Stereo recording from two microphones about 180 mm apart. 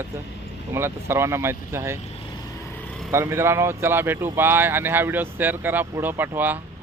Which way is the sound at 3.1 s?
15° right (ahead or behind).